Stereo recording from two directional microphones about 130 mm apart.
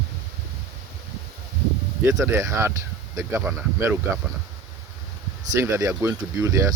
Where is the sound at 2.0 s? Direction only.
25° right (ahead or behind).